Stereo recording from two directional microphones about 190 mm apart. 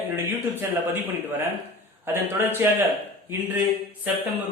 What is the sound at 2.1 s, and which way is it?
Speech, 10° right (ahead or behind).